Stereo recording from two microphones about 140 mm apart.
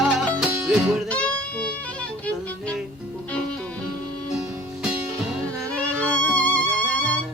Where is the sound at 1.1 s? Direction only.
10° left (ahead or behind).